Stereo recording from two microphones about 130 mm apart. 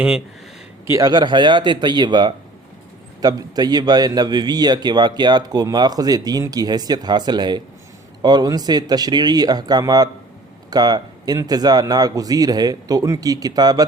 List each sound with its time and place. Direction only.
0.9 s a man's voice: 30° right (ahead or behind)